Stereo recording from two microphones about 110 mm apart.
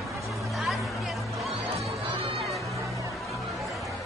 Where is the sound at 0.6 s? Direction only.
Centre (ahead or behind).